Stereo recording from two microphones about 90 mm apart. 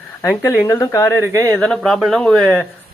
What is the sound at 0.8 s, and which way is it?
Speech, 30° left (ahead or behind).